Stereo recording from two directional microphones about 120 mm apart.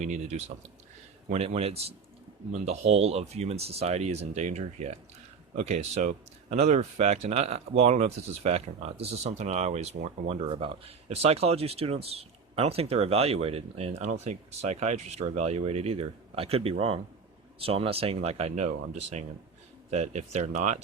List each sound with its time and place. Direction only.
0.0 s speech: 75° right (ahead or behind)
19.9 s speech: 65° right (ahead or behind)